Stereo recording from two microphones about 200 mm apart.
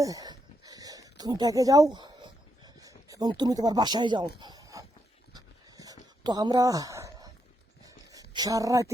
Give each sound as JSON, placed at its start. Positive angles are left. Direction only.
{"t": 0.0, "sound": "dog", "side_deg": -15}
{"t": 1.2, "sound": "speech", "side_deg": -20}
{"t": 4.4, "sound": "dog", "side_deg": -20}
{"t": 5.3, "sound": "a sound", "side_deg": -20}